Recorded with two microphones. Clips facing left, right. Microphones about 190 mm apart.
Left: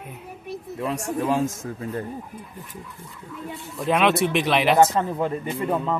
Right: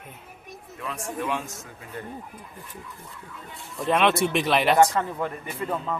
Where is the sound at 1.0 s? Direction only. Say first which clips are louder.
Left 5 dB; 35° left (ahead or behind).